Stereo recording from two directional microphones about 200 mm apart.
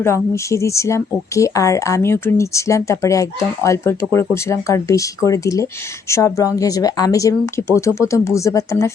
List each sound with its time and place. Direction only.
0.0 s speech: 15° left (ahead or behind)